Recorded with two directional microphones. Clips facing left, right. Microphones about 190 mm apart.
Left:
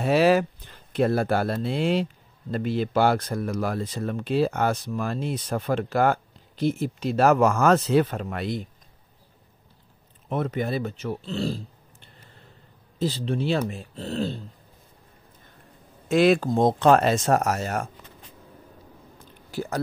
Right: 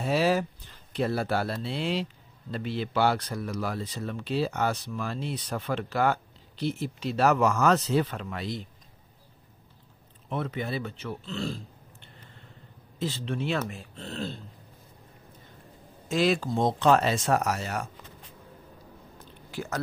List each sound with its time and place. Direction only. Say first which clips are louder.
0.0 s speech: left 6 dB; 65° left (ahead or behind)
10.3 s speech: left 5 dB; 45° left (ahead or behind)
16.1 s speech: left 6 dB; 60° left (ahead or behind)
19.5 s speech: left 4 dB; 30° left (ahead or behind)